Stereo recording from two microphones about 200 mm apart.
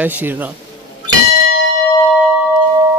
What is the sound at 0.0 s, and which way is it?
Speech, 10° right (ahead or behind).